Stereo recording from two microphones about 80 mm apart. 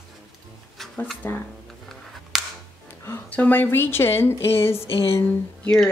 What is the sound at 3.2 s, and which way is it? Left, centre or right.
Speech, left.